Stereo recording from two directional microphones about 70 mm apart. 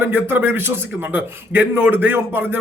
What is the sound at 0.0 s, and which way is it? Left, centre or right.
Speech, right.